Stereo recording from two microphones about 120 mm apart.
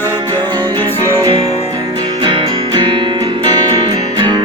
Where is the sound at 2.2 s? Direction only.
40° right (ahead or behind).